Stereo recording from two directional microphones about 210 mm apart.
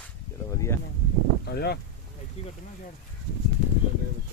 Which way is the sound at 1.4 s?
50° left (ahead or behind).